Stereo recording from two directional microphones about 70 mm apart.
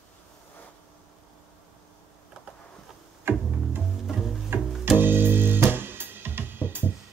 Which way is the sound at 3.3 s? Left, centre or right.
Right.